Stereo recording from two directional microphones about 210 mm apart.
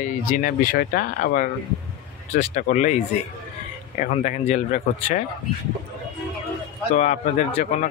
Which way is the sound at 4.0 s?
35° left (ahead or behind).